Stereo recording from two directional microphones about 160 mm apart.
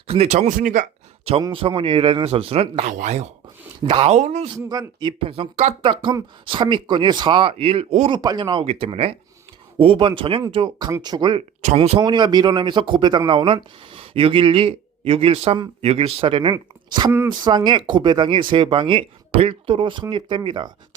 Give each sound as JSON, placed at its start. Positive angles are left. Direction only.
{"t": 0.1, "sound": "speech", "side_deg": -45}
{"t": 1.5, "sound": "speech", "side_deg": -35}
{"t": 3.8, "sound": "speech", "side_deg": -35}
{"t": 4.7, "sound": "speech", "side_deg": -25}
{"t": 8.1, "sound": "speech", "side_deg": -25}
{"t": 11.6, "sound": "speech", "side_deg": -45}
{"t": 11.9, "sound": "speech", "side_deg": -30}